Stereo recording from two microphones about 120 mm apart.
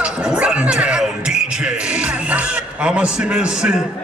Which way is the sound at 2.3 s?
10° right (ahead or behind).